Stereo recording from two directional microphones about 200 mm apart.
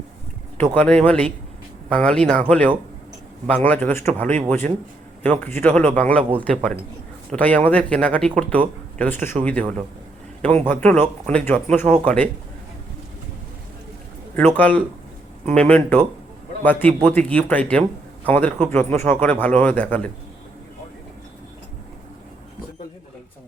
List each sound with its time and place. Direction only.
0.6 s speech: 10° left (ahead or behind)
14.3 s speech: 10° left (ahead or behind)